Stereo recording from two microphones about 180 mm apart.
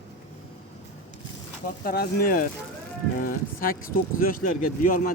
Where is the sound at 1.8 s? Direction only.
55° left (ahead or behind).